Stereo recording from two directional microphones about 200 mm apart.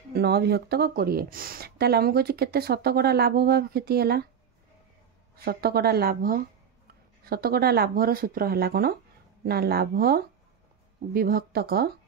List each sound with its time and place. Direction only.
0.1 s speech: 55° right (ahead or behind)
5.3 s speech: 50° right (ahead or behind)